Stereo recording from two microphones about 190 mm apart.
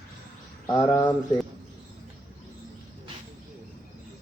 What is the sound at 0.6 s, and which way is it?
Speech, 15° left (ahead or behind).